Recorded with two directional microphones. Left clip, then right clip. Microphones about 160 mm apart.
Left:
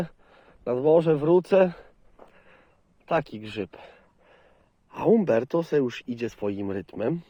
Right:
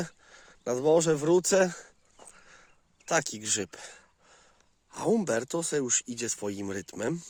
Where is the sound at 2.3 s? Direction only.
40° right (ahead or behind).